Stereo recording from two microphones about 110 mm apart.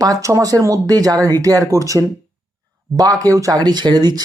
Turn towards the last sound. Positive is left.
turn(degrees=-40)  # may be behind; listen again after turning